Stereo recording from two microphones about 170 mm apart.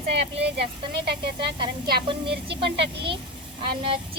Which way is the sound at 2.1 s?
30° right (ahead or behind).